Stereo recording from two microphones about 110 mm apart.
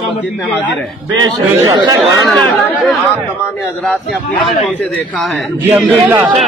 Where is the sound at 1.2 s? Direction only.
35° right (ahead or behind).